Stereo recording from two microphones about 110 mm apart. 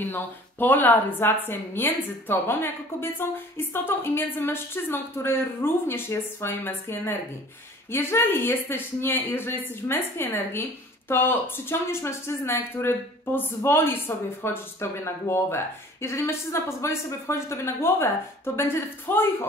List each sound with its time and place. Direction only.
0.1 s speech: 15° left (ahead or behind)